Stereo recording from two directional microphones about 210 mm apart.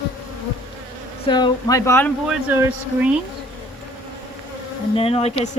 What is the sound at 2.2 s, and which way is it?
Speech, 5° right (ahead or behind).